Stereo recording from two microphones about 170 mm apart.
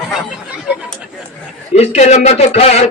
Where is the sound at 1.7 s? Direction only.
40° left (ahead or behind).